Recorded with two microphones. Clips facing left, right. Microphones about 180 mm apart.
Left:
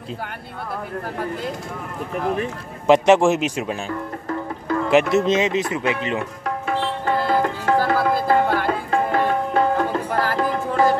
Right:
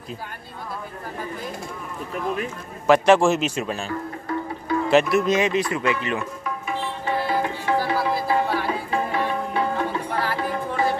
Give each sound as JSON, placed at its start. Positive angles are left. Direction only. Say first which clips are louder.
{"t": 0.7, "sound": "speech", "louder": "left 5 dB", "side_deg": 70}
{"t": 2.9, "sound": "speech", "louder": "left 2 dB", "side_deg": 20}
{"t": 4.3, "sound": "music", "louder": "left 1 dB", "side_deg": 50}
{"t": 5.1, "sound": "speech", "louder": "left 2 dB", "side_deg": 25}
{"t": 6.1, "sound": "tabla", "louder": "left 3 dB", "side_deg": 70}